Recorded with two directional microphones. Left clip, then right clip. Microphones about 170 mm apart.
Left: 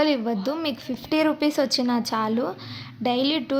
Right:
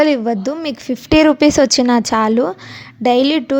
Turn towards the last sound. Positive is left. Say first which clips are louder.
# right 10 dB
turn(degrees=-50)  # may be behind; listen again after turning